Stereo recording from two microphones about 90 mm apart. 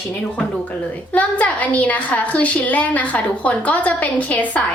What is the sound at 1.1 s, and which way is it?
A woman's voice, 15° left (ahead or behind).